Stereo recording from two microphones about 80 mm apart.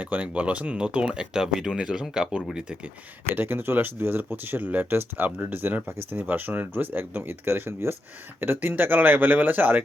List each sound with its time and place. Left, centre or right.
0.0 s speech: centre
3.3 s speech: right